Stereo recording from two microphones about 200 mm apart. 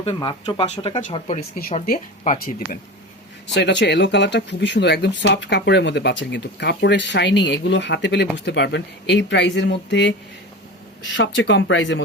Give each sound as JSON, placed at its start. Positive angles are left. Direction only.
{"t": 0.0, "sound": "speech", "side_deg": 25}
{"t": 3.4, "sound": "speech", "side_deg": 60}